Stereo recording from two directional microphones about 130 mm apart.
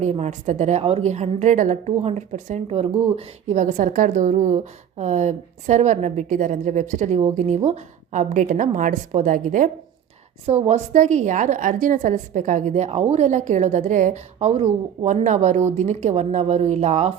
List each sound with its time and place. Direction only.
0.0 s a woman's voice: 60° right (ahead or behind)
2.6 s speech: 50° right (ahead or behind)
3.2 s a woman's voice: 65° right (ahead or behind)
10.4 s a woman's voice: 55° right (ahead or behind); by 14.2 s 75° right (ahead or behind)
14.3 s a woman's voice: 55° right (ahead or behind)